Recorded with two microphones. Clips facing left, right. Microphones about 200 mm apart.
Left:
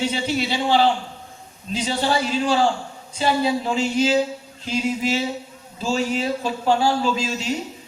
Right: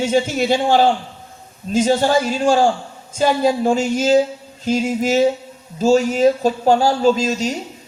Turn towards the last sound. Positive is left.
turn(degrees=-40)  # may be behind; listen again after turning